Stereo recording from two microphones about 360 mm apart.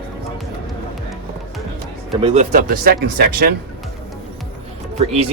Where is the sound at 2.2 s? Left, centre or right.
Right.